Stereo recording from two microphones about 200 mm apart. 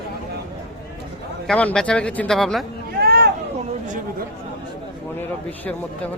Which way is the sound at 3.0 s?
55° right (ahead or behind).